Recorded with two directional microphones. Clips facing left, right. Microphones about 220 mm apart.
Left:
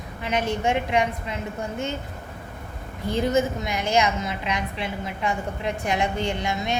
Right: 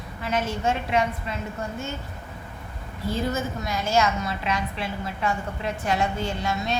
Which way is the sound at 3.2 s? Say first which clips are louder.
Left 7 dB; 15° left (ahead or behind).